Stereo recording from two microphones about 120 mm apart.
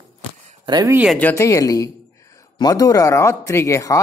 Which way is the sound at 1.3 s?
25° left (ahead or behind).